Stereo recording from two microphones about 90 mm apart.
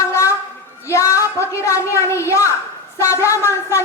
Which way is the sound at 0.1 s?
30° left (ahead or behind).